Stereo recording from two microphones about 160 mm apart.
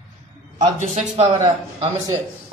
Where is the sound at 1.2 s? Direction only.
25° right (ahead or behind).